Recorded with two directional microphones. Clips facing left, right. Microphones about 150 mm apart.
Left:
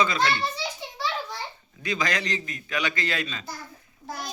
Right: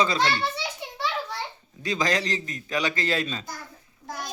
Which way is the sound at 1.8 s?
35° right (ahead or behind).